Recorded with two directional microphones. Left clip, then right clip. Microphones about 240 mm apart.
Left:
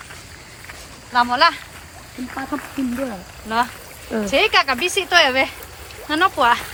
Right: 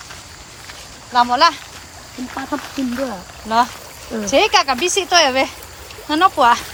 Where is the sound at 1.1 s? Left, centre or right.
Centre.